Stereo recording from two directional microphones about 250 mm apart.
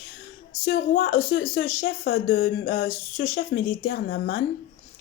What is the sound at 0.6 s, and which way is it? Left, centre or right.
Speech, left.